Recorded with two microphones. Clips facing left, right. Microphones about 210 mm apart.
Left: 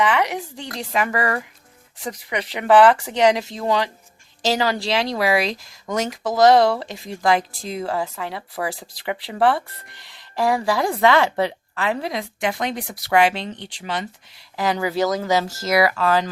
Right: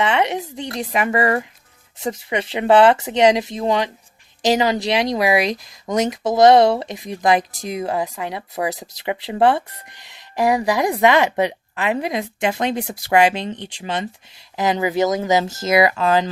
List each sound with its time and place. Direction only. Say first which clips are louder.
0.0 s speech: right 1 dB; 25° right (ahead or behind)